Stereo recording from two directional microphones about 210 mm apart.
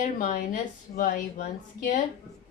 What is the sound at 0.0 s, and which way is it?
Speech, 40° left (ahead or behind).